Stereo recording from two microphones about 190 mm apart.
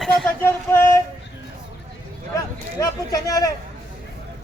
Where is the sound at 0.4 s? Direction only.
15° left (ahead or behind).